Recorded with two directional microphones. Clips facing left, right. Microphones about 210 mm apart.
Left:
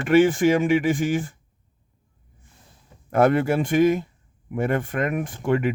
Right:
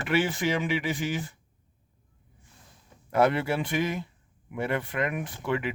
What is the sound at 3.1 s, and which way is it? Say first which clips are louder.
Speech: left 5 dB; 50° left (ahead or behind).